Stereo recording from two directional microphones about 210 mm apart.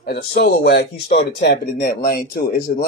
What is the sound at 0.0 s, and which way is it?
Speech, 50° left (ahead or behind).